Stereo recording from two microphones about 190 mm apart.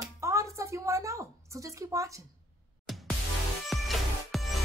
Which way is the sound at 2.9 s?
Centre (ahead or behind).